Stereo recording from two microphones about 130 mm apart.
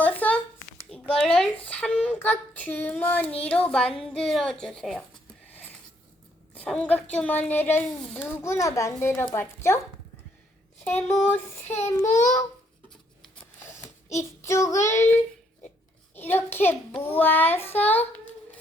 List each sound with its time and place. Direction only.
0.0 s a sound: 10° left (ahead or behind)
1.3 s a child's voice: 10° left (ahead or behind)
6.5 s a child's voice: 10° left (ahead or behind)
10.8 s a child's voice: 15° left (ahead or behind)
13.6 s child singing: 20° left (ahead or behind)
16.1 s a child's voice: 15° left (ahead or behind)